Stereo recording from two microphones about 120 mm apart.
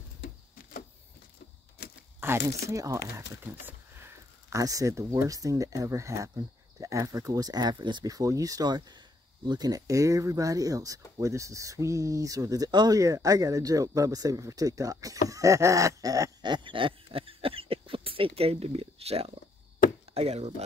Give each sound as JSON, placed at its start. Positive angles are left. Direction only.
{"t": 2.1, "sound": "speech", "side_deg": -20}